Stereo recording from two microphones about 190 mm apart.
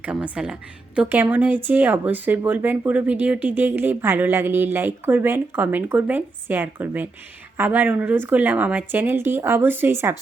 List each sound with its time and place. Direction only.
0.0 s a woman's voice: 5° right (ahead or behind)